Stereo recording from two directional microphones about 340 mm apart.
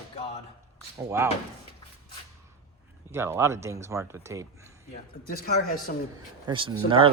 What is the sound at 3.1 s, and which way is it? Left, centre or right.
Speech, centre.